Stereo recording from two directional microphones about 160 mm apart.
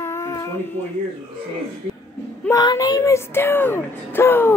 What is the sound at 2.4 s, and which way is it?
Speech, 20° left (ahead or behind).